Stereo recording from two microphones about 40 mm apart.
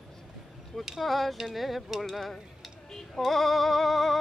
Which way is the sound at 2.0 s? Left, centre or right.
Centre.